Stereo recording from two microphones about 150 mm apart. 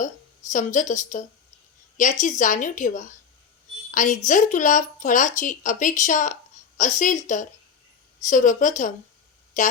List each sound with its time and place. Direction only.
0.5 s speech: 55° left (ahead or behind)